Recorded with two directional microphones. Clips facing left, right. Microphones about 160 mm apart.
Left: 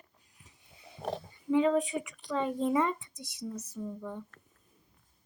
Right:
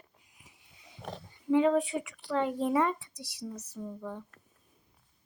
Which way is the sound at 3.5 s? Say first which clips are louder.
Left 2 dB; 10° right (ahead or behind).